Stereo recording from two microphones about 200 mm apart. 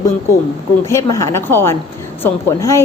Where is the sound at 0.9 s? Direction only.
15° left (ahead or behind).